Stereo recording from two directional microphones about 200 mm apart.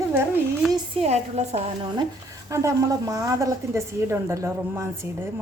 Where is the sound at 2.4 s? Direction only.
15° right (ahead or behind).